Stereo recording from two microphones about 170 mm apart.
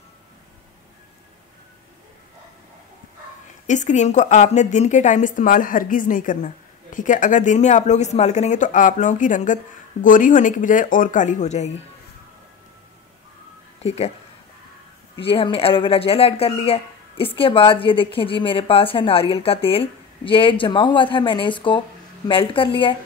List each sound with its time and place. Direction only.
3.6 s a woman's voice: 45° left (ahead or behind)
13.8 s speech: 40° left (ahead or behind)
15.1 s speech: 30° left (ahead or behind)